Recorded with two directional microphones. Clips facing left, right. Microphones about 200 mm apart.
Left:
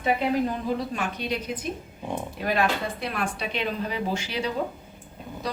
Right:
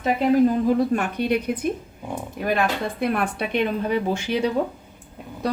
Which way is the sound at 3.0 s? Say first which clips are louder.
Right 6 dB; 55° right (ahead or behind).